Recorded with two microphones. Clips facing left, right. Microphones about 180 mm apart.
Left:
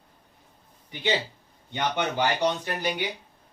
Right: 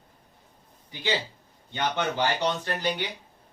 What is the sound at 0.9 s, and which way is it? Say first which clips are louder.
Speech: left 2 dB; 20° left (ahead or behind).